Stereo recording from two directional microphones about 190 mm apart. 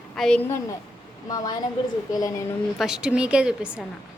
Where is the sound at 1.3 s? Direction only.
20° left (ahead or behind).